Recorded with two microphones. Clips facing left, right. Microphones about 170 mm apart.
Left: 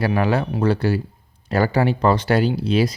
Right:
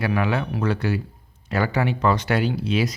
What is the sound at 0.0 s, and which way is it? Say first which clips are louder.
Speech: left 3 dB; 35° left (ahead or behind).